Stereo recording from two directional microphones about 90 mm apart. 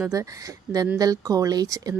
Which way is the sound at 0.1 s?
40° right (ahead or behind).